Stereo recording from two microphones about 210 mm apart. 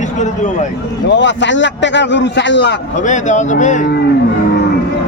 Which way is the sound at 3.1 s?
35° left (ahead or behind).